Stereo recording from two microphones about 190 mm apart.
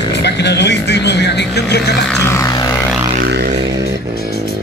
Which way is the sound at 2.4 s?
20° left (ahead or behind).